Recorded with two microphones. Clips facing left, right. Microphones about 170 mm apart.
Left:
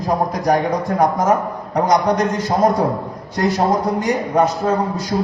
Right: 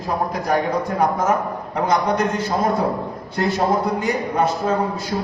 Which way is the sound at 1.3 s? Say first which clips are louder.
Left 3 dB; 40° left (ahead or behind).